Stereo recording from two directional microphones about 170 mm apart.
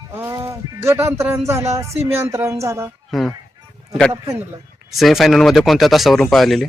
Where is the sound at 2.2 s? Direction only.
15° right (ahead or behind).